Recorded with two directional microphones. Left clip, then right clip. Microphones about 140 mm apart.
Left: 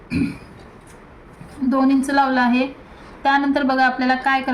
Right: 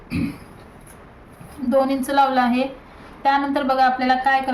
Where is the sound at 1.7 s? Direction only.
15° right (ahead or behind).